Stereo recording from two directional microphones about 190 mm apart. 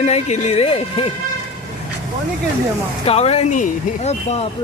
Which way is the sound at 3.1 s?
35° left (ahead or behind).